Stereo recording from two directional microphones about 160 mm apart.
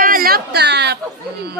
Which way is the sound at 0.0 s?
60° right (ahead or behind).